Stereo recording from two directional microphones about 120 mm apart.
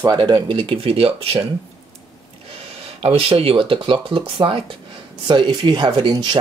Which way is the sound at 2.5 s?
55° right (ahead or behind).